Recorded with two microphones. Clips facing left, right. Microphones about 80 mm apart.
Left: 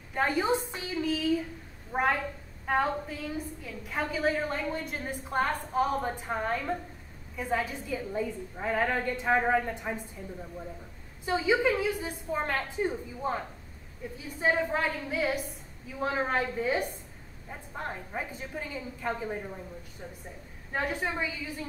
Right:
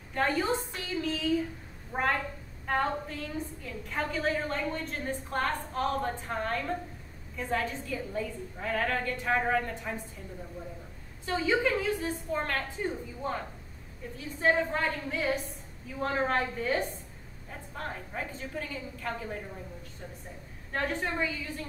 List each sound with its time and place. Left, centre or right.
0.1 s a woman's voice: centre
1.0 s a woman's voice: centre
11.2 s a woman's voice: centre
20.7 s a woman's voice: centre